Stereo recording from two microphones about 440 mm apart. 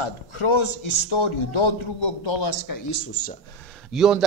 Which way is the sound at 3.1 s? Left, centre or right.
Left.